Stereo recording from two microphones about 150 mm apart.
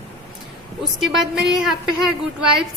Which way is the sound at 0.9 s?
Centre (ahead or behind).